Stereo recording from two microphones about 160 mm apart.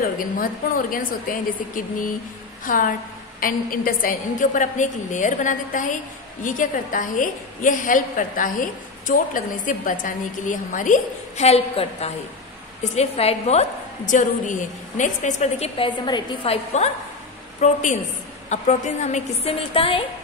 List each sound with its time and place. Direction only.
0.0 s a woman's voice: 60° left (ahead or behind)
2.6 s a woman's voice: 60° left (ahead or behind); by 20.1 s 35° left (ahead or behind)